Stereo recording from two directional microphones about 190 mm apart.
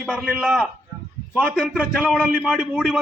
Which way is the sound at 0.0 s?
5° right (ahead or behind).